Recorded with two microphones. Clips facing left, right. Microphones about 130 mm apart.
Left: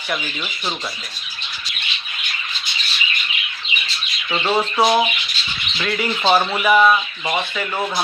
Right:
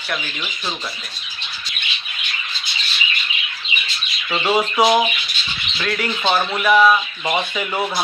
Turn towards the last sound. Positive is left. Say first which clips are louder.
# right 1 dB
turn(degrees=-5)  # may be behind; listen again after turning